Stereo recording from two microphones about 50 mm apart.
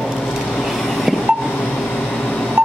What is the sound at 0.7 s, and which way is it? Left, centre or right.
Vehicle, centre.